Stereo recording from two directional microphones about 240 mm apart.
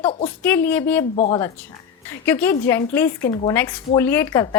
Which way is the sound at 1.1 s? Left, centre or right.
Left.